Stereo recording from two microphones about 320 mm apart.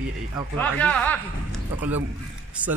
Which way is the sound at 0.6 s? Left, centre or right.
Centre.